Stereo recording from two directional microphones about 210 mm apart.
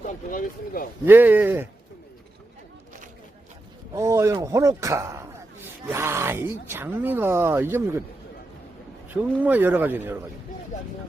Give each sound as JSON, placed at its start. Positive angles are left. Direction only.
{"t": 0.3, "sound": "speech", "side_deg": 40}
{"t": 1.0, "sound": "speech", "side_deg": -10}
{"t": 3.9, "sound": "speech", "side_deg": -15}
{"t": 9.0, "sound": "speech", "side_deg": -10}